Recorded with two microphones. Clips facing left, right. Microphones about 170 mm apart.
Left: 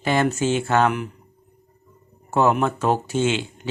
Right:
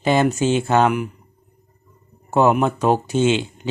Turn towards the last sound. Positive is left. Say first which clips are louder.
# right 4 dB
turn(degrees=-20)  # may be behind; listen again after turning